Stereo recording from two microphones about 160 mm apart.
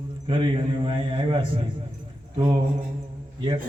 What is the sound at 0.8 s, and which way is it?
Speech, 35° right (ahead or behind).